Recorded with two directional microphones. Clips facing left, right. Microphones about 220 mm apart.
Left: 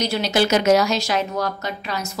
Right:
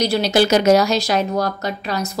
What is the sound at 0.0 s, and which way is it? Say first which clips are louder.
A woman's voice: right 4 dB; 35° right (ahead or behind).